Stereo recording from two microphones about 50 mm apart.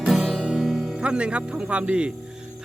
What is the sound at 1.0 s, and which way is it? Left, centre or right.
Speech, right.